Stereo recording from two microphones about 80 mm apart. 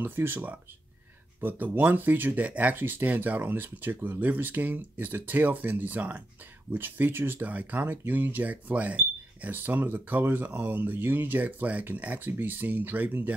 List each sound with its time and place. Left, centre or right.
0.0 s speech: right